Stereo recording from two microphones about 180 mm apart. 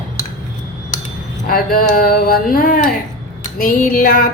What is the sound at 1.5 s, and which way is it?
A woman's voice, 55° left (ahead or behind).